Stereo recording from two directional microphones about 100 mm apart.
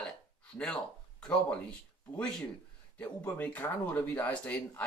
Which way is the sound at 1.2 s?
10° left (ahead or behind).